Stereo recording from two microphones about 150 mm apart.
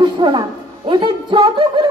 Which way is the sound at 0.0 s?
30° right (ahead or behind).